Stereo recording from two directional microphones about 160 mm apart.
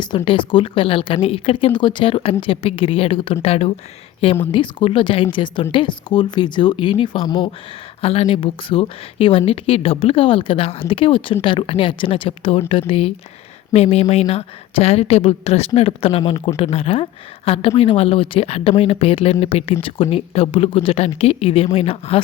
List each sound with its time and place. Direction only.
0.3 s speech: 30° left (ahead or behind)